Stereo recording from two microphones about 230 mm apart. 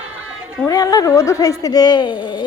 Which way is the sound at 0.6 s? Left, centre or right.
Centre.